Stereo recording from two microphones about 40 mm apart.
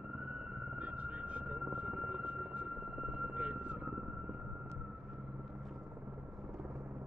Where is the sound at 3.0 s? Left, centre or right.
Centre.